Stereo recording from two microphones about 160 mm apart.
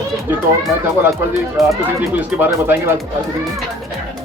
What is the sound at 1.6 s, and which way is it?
Speech, centre (ahead or behind).